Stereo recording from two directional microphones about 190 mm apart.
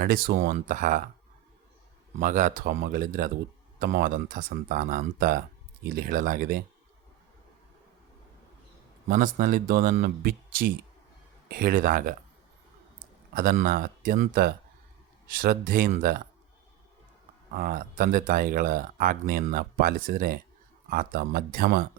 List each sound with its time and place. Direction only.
0.0 s speech: 50° right (ahead or behind)
2.1 s speech: 40° right (ahead or behind)
9.0 s speech: 45° right (ahead or behind)
13.3 s speech: 50° right (ahead or behind)
17.5 s speech: 50° right (ahead or behind)